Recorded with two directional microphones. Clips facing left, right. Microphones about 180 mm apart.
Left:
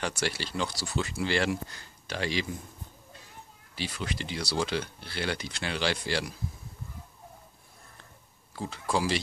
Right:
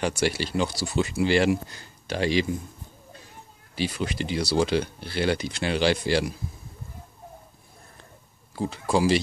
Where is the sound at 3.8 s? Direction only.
15° right (ahead or behind).